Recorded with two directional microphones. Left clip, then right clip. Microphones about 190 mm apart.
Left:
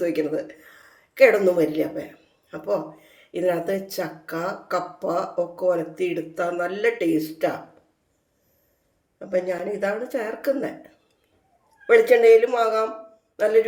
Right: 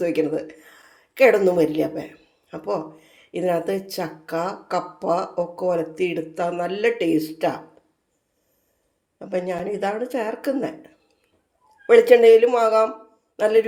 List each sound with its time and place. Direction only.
0.0 s speech: 25° right (ahead or behind)
9.1 s speech: 25° right (ahead or behind)
11.9 s speech: 25° right (ahead or behind)